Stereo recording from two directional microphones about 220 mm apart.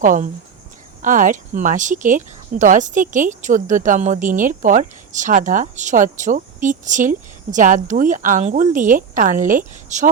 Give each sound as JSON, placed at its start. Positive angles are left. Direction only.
{"t": 0.0, "sound": "speech", "side_deg": -35}